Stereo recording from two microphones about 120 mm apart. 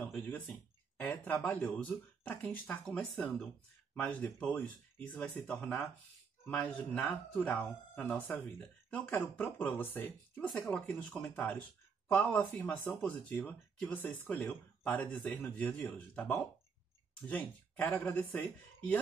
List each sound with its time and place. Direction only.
0.0 s speech: 15° left (ahead or behind)